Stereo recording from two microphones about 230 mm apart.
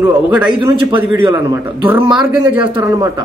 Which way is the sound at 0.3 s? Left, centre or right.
Centre.